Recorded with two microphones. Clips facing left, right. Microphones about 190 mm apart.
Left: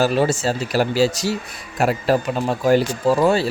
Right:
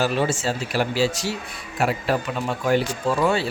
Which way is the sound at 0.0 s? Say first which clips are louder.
Left 4 dB; 40° left (ahead or behind).